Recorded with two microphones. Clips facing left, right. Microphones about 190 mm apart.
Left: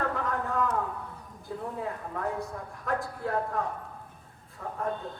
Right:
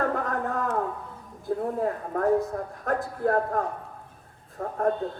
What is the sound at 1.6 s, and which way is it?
A man's voice, 45° right (ahead or behind).